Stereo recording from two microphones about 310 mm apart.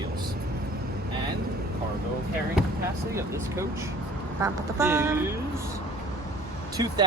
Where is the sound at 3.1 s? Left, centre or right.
Centre.